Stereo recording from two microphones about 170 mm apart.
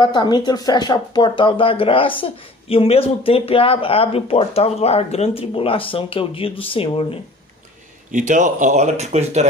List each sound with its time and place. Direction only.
0.0 s speech: 25° left (ahead or behind)
8.1 s speech: 45° right (ahead or behind)